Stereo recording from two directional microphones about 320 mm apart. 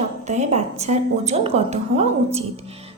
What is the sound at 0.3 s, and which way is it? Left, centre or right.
Music, right.